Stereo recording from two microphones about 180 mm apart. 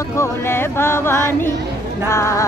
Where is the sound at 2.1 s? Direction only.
15° left (ahead or behind).